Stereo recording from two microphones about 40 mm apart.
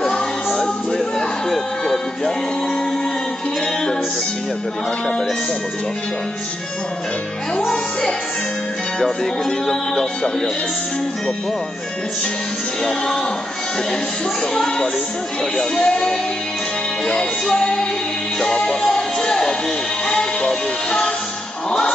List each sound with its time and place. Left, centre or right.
0.0 s music: centre
9.0 s speech: centre
12.8 s speech: centre
15.5 s speech: left
17.0 s music: centre
21.6 s music: left